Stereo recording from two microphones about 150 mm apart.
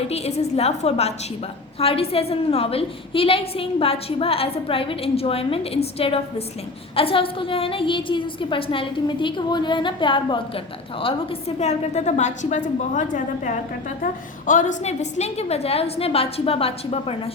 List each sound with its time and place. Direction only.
0.1 s a woman's voice: 45° left (ahead or behind)